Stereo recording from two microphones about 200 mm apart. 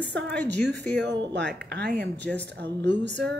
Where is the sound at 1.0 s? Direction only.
60° right (ahead or behind).